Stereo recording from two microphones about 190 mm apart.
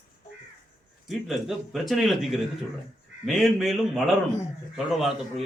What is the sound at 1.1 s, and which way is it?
A man's voice, centre (ahead or behind).